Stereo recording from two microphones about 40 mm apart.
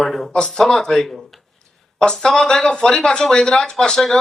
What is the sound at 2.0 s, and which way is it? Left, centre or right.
Speech, left.